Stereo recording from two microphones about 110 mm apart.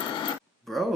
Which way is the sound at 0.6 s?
Centre (ahead or behind).